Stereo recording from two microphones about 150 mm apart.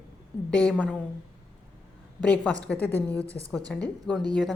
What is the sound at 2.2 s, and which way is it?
A woman's voice, 10° left (ahead or behind).